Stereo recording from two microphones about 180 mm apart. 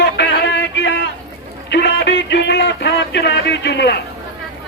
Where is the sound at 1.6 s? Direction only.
70° left (ahead or behind).